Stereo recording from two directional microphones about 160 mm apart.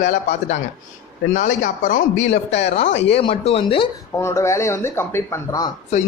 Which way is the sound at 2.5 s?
40° left (ahead or behind).